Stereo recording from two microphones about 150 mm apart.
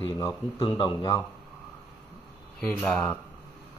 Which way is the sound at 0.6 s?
30° left (ahead or behind).